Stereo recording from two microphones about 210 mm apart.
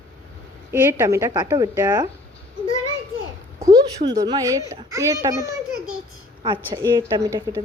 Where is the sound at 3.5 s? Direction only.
15° right (ahead or behind).